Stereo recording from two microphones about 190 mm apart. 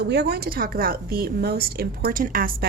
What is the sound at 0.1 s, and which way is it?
A woman's voice, 60° right (ahead or behind).